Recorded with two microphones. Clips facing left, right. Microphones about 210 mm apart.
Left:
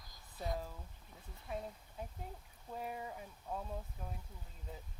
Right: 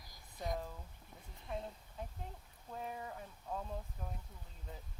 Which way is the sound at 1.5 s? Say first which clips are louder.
Even; 5° left (ahead or behind).